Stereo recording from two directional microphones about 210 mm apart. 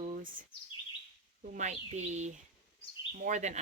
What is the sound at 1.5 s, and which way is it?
Speech, 35° right (ahead or behind).